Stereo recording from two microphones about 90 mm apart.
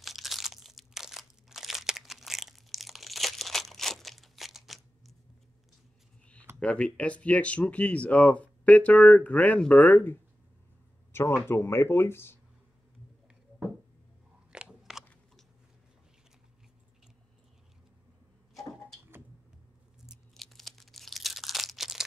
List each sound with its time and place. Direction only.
0.0 s crunch: centre (ahead or behind)
6.6 s speech: 10° left (ahead or behind)
11.1 s speech: 25° left (ahead or behind)
14.5 s crunch: 10° right (ahead or behind)
18.5 s a sound: centre (ahead or behind)
20.1 s tearing: centre (ahead or behind)